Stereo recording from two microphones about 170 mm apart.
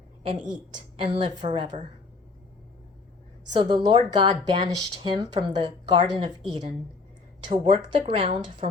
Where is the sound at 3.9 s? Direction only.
25° right (ahead or behind).